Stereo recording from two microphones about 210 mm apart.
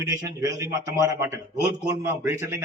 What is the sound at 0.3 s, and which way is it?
A man's voice, 15° right (ahead or behind).